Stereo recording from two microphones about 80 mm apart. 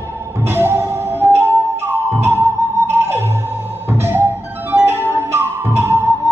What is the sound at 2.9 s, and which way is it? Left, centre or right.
Music, right.